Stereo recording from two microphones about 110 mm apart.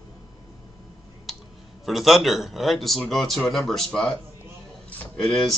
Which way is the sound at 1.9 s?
Centre (ahead or behind).